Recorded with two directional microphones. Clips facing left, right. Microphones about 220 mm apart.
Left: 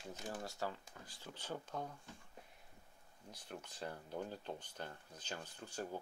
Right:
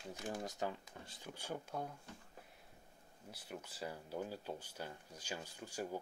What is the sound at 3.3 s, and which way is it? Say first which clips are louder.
Speech: right 1 dB; 5° right (ahead or behind).